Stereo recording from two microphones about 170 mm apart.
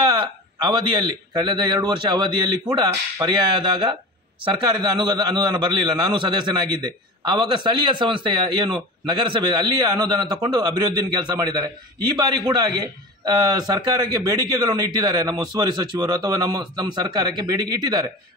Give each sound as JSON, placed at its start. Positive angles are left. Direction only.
{"t": 0.0, "sound": "a man's voice", "side_deg": -25}